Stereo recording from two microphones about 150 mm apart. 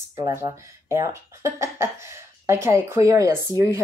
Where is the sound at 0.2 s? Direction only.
20° right (ahead or behind).